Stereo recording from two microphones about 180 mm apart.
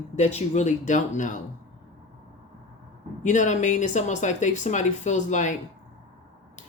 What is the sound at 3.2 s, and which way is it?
Speech, 45° left (ahead or behind).